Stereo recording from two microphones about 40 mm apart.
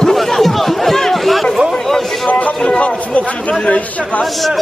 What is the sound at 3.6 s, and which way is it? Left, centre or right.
Chatter, left.